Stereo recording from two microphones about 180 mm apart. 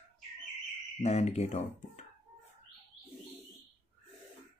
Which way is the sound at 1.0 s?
35° left (ahead or behind).